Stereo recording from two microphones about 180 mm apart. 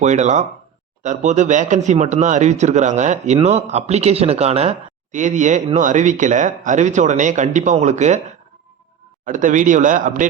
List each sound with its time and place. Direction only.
0.0 s speech: 40° right (ahead or behind)
9.2 s speech: 45° right (ahead or behind)